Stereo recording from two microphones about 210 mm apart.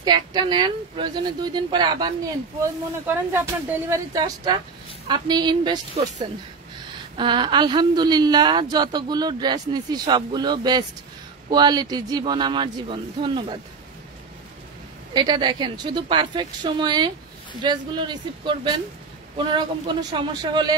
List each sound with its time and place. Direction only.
0.0 s a woman's voice: 20° right (ahead or behind)
2.6 s a woman's voice: 10° right (ahead or behind)
7.2 s a woman's voice: 25° right (ahead or behind)
15.1 s a woman's voice: 20° right (ahead or behind)